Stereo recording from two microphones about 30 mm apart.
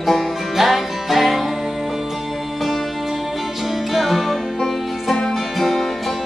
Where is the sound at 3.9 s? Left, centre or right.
Centre.